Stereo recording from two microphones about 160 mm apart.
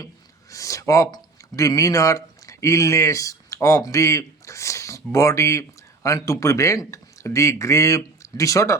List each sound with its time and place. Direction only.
0.5 s speech: 20° left (ahead or behind)